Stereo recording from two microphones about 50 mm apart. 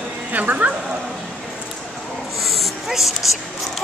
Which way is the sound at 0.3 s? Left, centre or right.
Right.